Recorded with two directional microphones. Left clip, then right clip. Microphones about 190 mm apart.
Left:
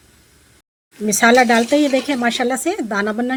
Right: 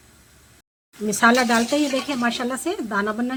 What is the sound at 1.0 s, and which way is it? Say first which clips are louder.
Speech: left 5 dB; 25° left (ahead or behind).